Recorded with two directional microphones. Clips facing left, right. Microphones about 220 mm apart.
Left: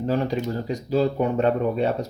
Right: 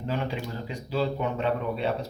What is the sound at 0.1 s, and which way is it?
Speech, 40° left (ahead or behind).